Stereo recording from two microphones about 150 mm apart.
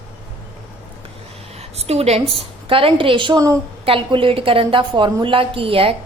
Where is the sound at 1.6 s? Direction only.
45° right (ahead or behind).